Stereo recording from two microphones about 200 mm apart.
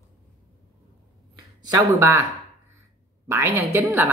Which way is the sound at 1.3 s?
20° right (ahead or behind).